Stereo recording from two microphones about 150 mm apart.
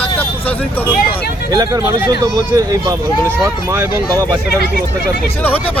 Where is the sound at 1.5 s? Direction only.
25° right (ahead or behind).